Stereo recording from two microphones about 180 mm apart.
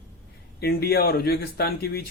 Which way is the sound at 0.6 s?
60° left (ahead or behind).